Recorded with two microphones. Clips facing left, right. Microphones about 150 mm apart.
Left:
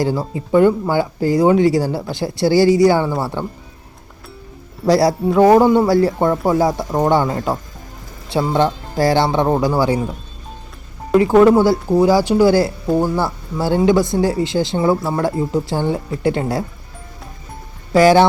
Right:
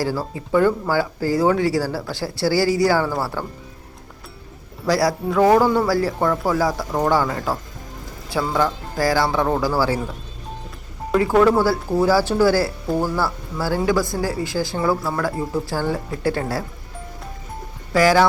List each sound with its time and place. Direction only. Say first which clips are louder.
0.0 s speech: left 4 dB; 20° left (ahead or behind)
4.9 s speech: left 5 dB; 25° left (ahead or behind)
11.1 s speech: left 5 dB; 20° left (ahead or behind)
17.9 s speech: left 5 dB; 25° left (ahead or behind)